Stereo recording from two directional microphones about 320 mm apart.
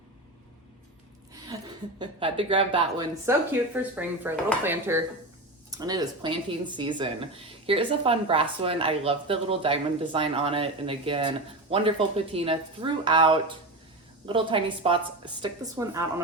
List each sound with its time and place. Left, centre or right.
1.5 s a woman's voice: centre